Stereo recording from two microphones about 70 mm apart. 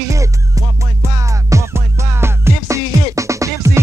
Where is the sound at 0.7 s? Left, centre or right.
Right.